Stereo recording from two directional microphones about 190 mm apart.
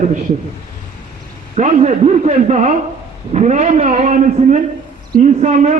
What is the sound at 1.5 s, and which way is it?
A man's voice, 35° right (ahead or behind).